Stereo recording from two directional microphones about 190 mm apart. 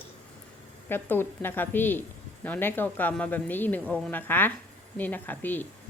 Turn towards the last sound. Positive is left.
turn(degrees=10)  # may be behind; listen again after turning